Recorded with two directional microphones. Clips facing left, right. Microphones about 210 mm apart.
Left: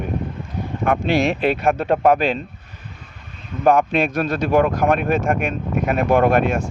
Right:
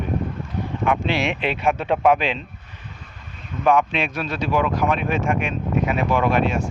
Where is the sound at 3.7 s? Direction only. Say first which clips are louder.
Left 3 dB; 45° left (ahead or behind).